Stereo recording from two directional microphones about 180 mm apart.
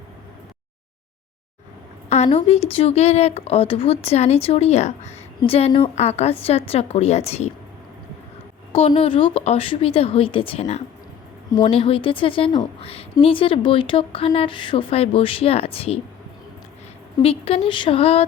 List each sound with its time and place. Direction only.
2.0 s speech: 40° left (ahead or behind)
8.7 s speech: 35° left (ahead or behind)
17.2 s speech: 30° left (ahead or behind)